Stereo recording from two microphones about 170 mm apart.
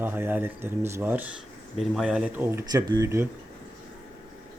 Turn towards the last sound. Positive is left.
turn(degrees=-15)  # may be behind; listen again after turning